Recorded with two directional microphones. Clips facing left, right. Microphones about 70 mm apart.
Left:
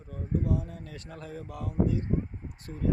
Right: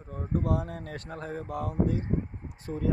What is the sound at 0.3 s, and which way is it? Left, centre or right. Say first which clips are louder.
Speech: right 2 dB; right.